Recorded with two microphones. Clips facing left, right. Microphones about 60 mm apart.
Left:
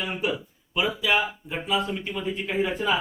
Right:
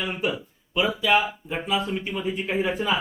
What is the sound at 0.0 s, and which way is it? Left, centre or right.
Speech, centre.